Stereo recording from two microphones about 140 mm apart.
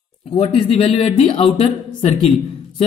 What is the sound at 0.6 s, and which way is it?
Speech, 40° left (ahead or behind).